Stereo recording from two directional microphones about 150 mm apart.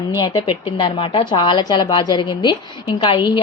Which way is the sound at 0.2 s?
35° left (ahead or behind).